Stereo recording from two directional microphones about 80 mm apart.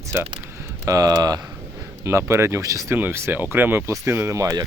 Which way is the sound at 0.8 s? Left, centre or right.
Right.